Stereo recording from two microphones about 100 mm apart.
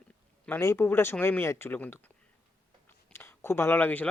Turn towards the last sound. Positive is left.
turn(degrees=20)  # may be behind; listen again after turning